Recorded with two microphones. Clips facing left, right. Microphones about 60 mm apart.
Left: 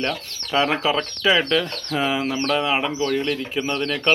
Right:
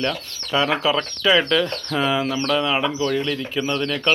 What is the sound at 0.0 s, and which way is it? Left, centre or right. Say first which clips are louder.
Speech: right 1 dB; left.